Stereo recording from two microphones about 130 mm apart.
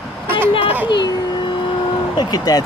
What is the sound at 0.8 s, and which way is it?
Speech, 35° left (ahead or behind).